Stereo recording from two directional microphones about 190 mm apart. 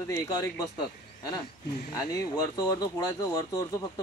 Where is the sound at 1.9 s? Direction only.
20° left (ahead or behind).